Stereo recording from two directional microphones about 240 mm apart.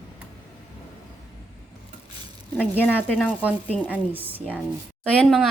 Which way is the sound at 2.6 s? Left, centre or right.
Centre.